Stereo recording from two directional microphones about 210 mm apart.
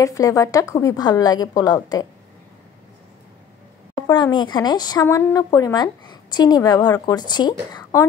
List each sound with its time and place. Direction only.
0.0 s speech: 15° left (ahead or behind)
4.1 s a woman's voice: 20° left (ahead or behind)